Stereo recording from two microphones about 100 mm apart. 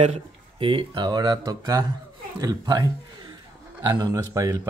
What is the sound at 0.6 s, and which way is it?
Speech, 55° right (ahead or behind).